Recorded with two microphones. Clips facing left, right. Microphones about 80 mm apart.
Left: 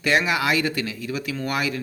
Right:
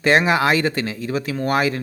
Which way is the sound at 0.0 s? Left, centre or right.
Right.